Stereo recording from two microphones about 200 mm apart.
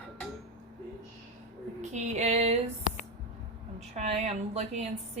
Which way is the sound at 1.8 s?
35° right (ahead or behind).